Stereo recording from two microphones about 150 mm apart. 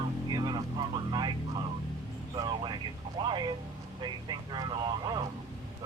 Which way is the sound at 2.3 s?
30° right (ahead or behind).